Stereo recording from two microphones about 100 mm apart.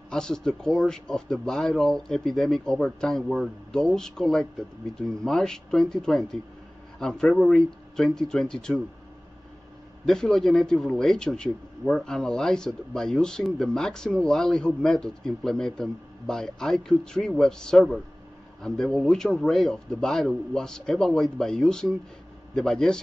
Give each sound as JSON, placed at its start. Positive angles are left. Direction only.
{"t": 0.1, "sound": "speech", "side_deg": 5}
{"t": 10.0, "sound": "a man's voice", "side_deg": 5}